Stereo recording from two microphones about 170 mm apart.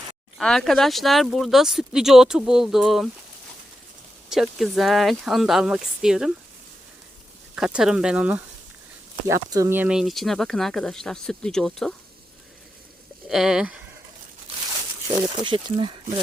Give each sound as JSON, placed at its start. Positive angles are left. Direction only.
{"t": 0.3, "sound": "speech", "side_deg": 5}
{"t": 4.3, "sound": "speech", "side_deg": 0}
{"t": 7.5, "sound": "speech", "side_deg": -5}
{"t": 9.2, "sound": "speech", "side_deg": -20}
{"t": 13.2, "sound": "speech", "side_deg": 0}
{"t": 15.4, "sound": "speech", "side_deg": -30}